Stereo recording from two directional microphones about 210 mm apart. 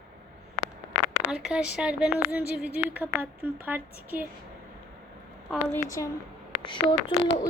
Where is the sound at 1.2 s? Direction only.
5° right (ahead or behind).